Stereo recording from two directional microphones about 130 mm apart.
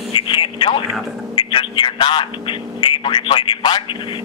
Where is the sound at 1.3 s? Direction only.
40° left (ahead or behind).